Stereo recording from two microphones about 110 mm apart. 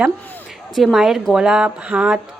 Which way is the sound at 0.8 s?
Centre (ahead or behind).